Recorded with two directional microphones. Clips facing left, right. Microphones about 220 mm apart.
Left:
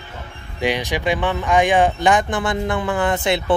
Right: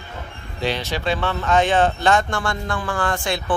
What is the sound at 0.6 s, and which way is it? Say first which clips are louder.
Speech: left 3 dB; 15° left (ahead or behind).